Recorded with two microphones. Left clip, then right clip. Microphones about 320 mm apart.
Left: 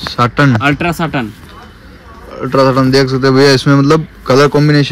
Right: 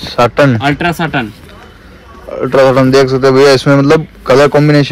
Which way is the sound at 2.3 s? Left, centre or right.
Centre.